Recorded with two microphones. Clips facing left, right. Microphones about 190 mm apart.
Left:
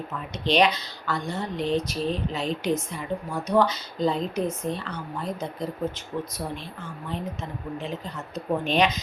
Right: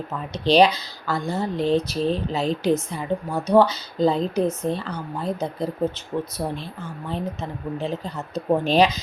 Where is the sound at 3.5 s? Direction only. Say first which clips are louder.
Right 5 dB; 30° right (ahead or behind).